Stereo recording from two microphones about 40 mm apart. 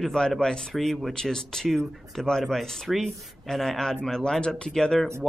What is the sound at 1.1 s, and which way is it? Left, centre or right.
Speech, centre.